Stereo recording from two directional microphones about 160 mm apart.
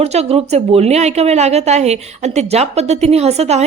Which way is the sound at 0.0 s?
40° right (ahead or behind).